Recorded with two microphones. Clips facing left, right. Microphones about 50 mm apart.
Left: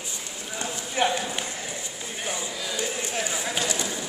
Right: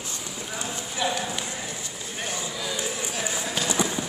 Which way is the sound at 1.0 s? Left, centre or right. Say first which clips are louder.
Left 4 dB; left.